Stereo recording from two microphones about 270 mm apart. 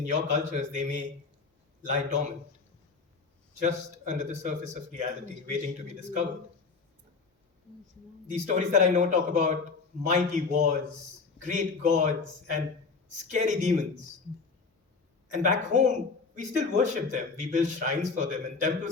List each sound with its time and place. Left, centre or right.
0.1 s speech: right
3.6 s speech: right
8.3 s speech: right
13.2 s speech: right
15.3 s speech: right